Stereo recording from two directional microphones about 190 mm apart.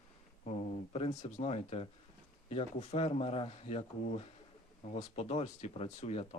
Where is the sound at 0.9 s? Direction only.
35° left (ahead or behind).